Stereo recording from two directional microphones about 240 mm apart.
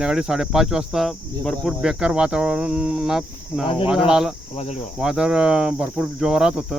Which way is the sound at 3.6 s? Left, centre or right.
Left.